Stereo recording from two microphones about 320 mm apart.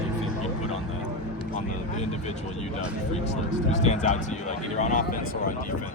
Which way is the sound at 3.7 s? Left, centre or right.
Left.